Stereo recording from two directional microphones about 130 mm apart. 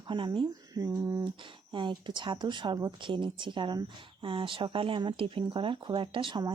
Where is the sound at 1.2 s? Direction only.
40° right (ahead or behind).